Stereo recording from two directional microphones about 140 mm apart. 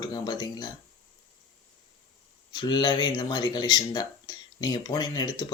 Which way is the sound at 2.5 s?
30° left (ahead or behind).